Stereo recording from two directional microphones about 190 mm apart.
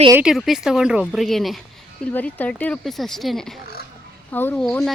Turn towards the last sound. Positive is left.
turn(degrees=5)  # may be behind; listen again after turning